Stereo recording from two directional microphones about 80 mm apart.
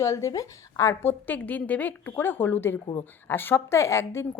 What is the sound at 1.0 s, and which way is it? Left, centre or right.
Speech, left.